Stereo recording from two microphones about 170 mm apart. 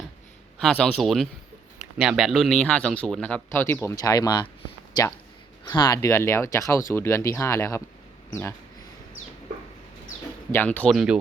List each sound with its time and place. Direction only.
0.6 s speech: 5° left (ahead or behind)
10.5 s speech: 10° left (ahead or behind)
10.9 s speech: 5° right (ahead or behind)